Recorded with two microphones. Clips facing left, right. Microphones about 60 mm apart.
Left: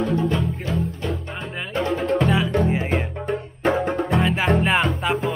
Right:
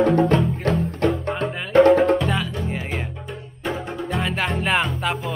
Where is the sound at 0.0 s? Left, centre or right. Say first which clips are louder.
Right 5 dB; right.